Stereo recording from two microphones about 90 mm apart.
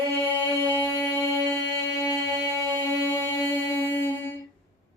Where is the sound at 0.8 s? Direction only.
25° left (ahead or behind).